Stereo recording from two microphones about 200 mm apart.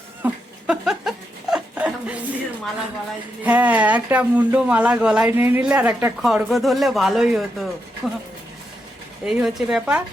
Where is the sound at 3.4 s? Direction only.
5° right (ahead or behind).